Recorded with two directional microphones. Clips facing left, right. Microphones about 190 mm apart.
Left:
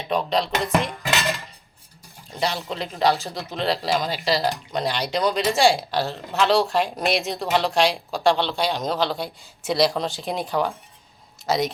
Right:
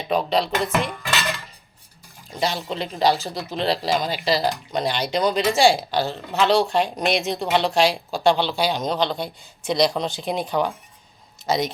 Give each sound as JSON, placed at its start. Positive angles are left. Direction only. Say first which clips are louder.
{"t": 0.3, "sound": "speech", "louder": "right 1 dB", "side_deg": 0}
{"t": 0.7, "sound": "dishes", "louder": "left 1 dB", "side_deg": 25}
{"t": 2.3, "sound": "speech", "louder": "right 1 dB", "side_deg": 0}